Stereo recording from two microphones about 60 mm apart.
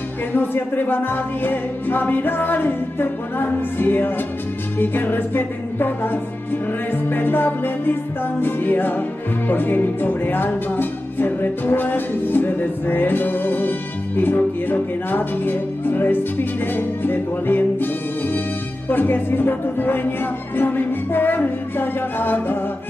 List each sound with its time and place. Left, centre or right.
0.3 s music: left
18.9 s music: left